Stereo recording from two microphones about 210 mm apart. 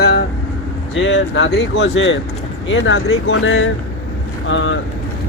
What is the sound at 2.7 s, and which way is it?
Speech, 75° left (ahead or behind).